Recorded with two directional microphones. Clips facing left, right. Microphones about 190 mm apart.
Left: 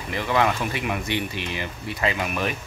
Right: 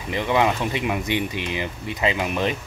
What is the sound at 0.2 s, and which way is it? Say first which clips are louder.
Speech: right 2 dB; 20° right (ahead or behind).